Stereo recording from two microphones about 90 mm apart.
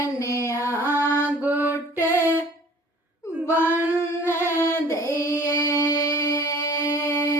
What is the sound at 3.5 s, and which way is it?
Child singing, 20° right (ahead or behind).